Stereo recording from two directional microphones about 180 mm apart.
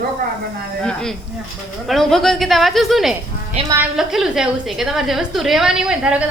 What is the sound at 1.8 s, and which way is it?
A woman's voice, centre (ahead or behind).